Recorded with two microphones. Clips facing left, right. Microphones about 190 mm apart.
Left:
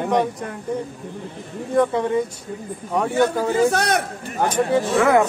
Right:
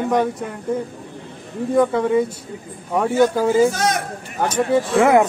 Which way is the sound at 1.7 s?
Centre (ahead or behind).